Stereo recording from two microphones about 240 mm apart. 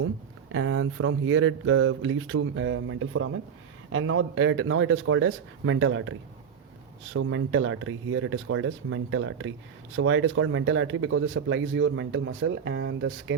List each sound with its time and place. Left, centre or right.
0.5 s speech: right